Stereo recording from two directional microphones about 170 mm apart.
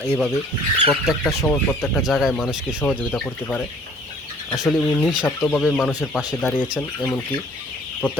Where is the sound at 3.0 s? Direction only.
10° left (ahead or behind).